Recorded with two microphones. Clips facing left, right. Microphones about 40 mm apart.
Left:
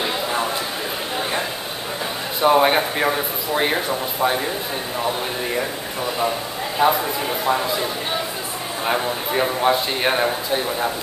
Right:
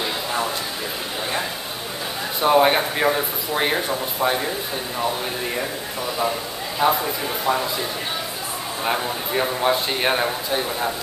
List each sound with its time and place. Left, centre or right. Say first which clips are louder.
0.0 s a sound: left 2 dB; centre
2.4 s speech: left 1 dB; centre
6.8 s a man's voice: left 2 dB; centre